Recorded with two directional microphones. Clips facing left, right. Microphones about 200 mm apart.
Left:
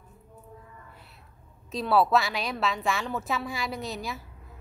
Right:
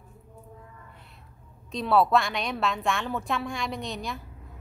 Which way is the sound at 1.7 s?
Centre (ahead or behind).